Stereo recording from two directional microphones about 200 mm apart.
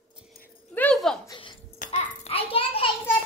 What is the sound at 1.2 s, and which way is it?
Speech, 25° left (ahead or behind).